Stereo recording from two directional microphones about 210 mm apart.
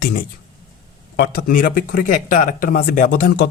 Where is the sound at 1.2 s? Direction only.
45° left (ahead or behind).